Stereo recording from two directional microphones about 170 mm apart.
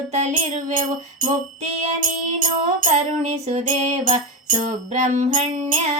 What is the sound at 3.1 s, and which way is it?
Music, 40° right (ahead or behind).